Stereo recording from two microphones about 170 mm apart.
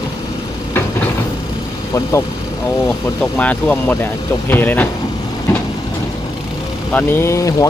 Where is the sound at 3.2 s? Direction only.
10° left (ahead or behind).